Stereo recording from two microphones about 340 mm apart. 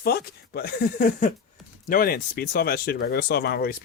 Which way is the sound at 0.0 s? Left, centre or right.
Left.